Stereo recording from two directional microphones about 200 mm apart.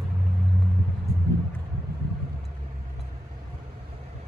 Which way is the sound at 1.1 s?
50° left (ahead or behind).